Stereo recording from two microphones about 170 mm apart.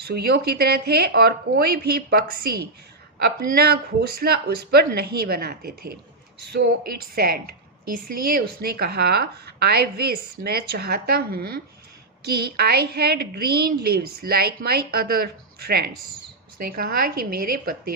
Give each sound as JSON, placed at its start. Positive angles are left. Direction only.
{"t": 0.0, "sound": "speech", "side_deg": -70}
{"t": 7.2, "sound": "a woman's voice", "side_deg": -65}